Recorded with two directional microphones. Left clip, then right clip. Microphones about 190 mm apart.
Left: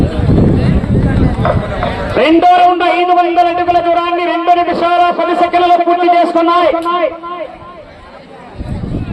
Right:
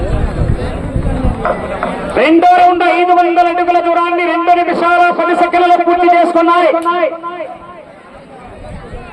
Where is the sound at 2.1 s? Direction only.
35° left (ahead or behind).